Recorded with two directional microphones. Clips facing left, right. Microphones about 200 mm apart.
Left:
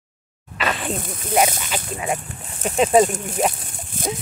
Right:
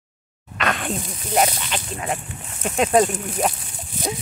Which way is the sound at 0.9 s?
55° left (ahead or behind).